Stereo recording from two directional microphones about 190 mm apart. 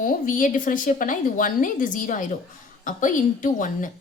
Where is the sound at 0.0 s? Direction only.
45° left (ahead or behind).